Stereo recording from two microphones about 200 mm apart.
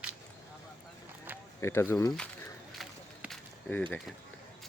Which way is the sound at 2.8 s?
Centre (ahead or behind).